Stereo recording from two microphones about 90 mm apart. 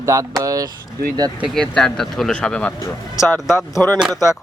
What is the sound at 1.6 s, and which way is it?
Speech, 5° left (ahead or behind).